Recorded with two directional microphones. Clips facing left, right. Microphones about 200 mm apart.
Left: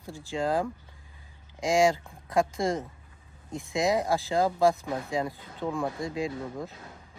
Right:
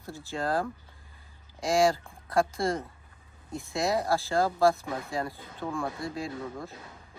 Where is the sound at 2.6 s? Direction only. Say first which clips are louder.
Left 1 dB; 15° left (ahead or behind).